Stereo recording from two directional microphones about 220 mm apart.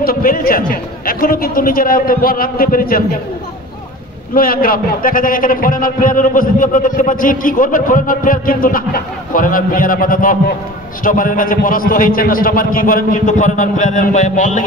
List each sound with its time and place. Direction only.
0.0 s a man's voice: 40° left (ahead or behind)
4.3 s a man's voice: 40° left (ahead or behind)